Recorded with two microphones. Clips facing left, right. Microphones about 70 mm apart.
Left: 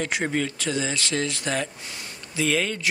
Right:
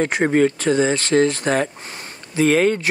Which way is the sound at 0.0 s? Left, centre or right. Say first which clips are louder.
Right 9 dB; right.